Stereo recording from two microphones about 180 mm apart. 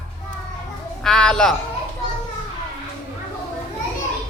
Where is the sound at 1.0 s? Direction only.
5° left (ahead or behind).